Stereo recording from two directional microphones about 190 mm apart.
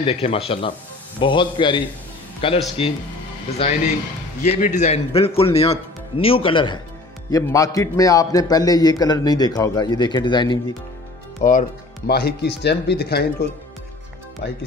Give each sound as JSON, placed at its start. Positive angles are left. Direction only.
{"t": 0.0, "sound": "a man's voice", "side_deg": 30}
{"t": 4.4, "sound": "a man's voice", "side_deg": 40}
{"t": 11.4, "sound": "speech", "side_deg": 40}
{"t": 12.1, "sound": "speech", "side_deg": 55}